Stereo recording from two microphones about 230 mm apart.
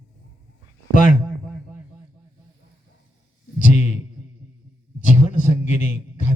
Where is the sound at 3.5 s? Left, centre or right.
Left.